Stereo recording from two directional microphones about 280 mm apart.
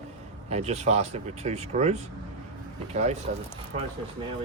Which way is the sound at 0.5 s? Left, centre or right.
Right.